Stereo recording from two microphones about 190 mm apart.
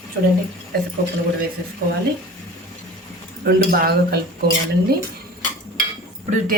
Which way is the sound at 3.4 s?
55° right (ahead or behind).